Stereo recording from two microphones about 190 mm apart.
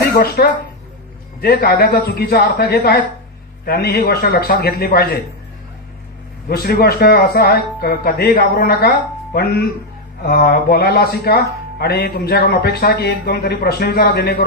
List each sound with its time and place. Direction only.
0.1 s speech: 55° left (ahead or behind)
6.5 s speech: 55° left (ahead or behind)